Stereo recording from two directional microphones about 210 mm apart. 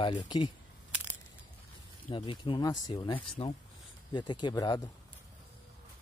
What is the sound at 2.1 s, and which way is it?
Speech, 25° left (ahead or behind).